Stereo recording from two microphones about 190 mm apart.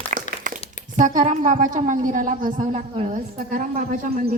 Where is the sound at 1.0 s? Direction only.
40° right (ahead or behind).